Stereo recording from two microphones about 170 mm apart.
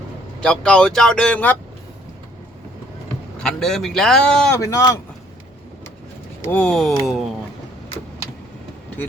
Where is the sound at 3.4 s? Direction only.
5° left (ahead or behind).